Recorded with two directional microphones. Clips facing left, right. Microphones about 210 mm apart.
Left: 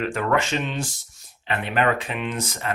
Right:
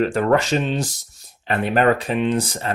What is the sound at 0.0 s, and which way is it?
Speech, 35° right (ahead or behind).